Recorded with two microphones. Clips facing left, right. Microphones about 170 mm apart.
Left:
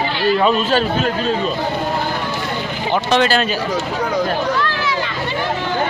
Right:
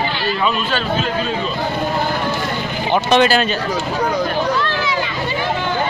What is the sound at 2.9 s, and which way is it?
Speech, 15° right (ahead or behind).